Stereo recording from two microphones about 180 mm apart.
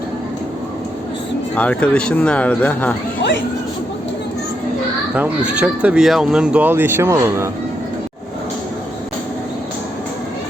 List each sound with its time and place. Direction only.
1.5 s speech: 5° left (ahead or behind)
3.2 s speech: 85° left
5.1 s speech: 10° right (ahead or behind)